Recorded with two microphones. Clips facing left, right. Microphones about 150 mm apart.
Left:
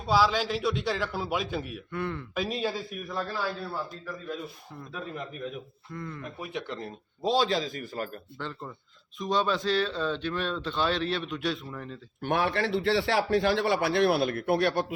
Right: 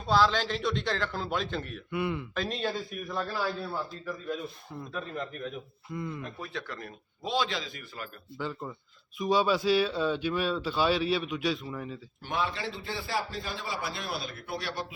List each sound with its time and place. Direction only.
0.0 s a man's voice: 10° left (ahead or behind)
1.9 s speech: 10° right (ahead or behind)
2.3 s a man's voice: 10° left (ahead or behind)
5.9 s speech: 15° right (ahead or behind)
6.4 s a man's voice: 20° left (ahead or behind); by 8.1 s 40° left (ahead or behind)
8.4 s speech: 5° right (ahead or behind)
12.2 s a man's voice: 60° left (ahead or behind)